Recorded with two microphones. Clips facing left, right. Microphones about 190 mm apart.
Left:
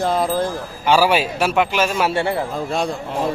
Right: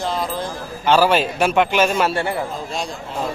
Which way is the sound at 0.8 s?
10° left (ahead or behind).